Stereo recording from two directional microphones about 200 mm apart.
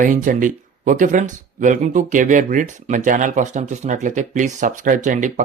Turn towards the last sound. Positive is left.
turn(degrees=-40)  # may be behind; listen again after turning